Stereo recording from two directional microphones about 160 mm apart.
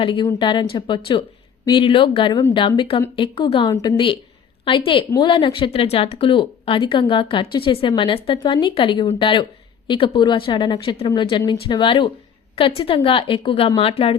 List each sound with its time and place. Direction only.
0.0 s speech: 30° left (ahead or behind)